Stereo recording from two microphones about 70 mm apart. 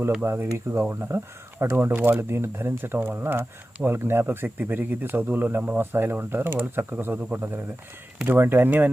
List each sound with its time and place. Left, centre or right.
0.2 s speech: right
2.2 s speech: right